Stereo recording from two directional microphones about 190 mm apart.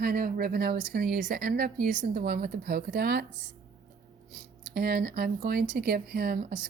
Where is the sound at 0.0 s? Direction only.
45° right (ahead or behind).